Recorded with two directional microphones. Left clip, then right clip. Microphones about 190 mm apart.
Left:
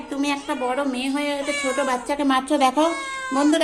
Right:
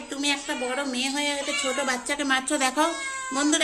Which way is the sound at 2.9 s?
35° left (ahead or behind).